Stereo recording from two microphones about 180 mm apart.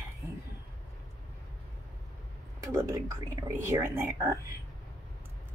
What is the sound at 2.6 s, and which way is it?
Speech, 15° right (ahead or behind).